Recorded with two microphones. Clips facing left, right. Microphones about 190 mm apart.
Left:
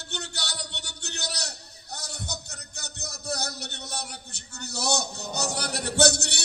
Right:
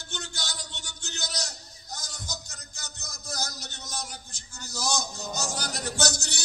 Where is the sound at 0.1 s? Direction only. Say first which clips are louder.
Left 2 dB; 65° left (ahead or behind).